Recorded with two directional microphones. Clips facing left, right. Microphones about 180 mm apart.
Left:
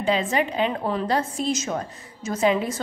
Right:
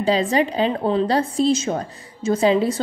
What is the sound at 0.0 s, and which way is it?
A woman's voice, 35° right (ahead or behind).